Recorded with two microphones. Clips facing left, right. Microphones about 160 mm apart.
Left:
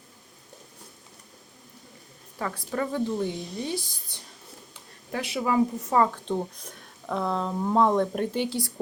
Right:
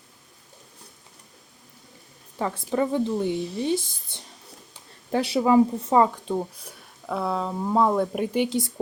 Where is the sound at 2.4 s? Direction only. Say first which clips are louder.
Right 5 dB; 20° right (ahead or behind).